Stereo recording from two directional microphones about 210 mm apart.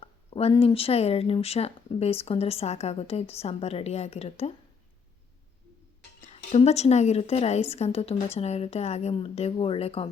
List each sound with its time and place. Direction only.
0.0 s speech: 30° left (ahead or behind)
6.5 s speech: 30° left (ahead or behind)